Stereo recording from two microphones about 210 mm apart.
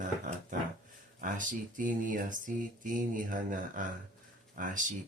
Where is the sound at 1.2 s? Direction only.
40° right (ahead or behind).